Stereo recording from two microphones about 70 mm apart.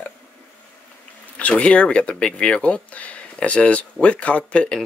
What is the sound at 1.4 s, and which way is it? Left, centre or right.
Speech, centre.